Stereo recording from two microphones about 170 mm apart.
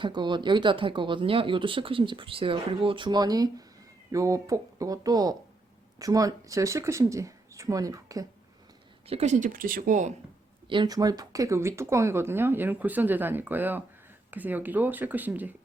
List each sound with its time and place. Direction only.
0.0 s speech: 25° right (ahead or behind)
9.0 s speech: 40° right (ahead or behind)
10.7 s speech: 25° right (ahead or behind); by 15.5 s 10° right (ahead or behind)